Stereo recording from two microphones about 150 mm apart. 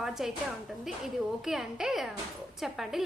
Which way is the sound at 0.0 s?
5° right (ahead or behind).